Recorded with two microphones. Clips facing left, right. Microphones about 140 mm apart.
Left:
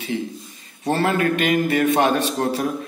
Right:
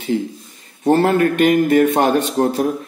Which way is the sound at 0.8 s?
50° right (ahead or behind).